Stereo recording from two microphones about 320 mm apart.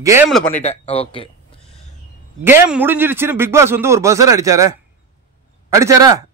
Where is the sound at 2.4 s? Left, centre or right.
Centre.